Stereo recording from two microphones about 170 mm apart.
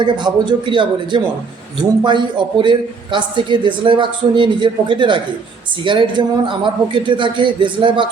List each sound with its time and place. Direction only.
0.0 s a man's voice: 25° right (ahead or behind)